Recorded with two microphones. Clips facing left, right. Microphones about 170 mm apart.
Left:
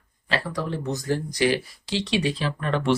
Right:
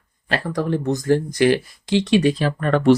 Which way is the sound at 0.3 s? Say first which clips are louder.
Right 5 dB; 50° right (ahead or behind).